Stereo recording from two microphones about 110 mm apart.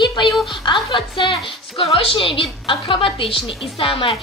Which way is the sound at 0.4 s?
45° left (ahead or behind).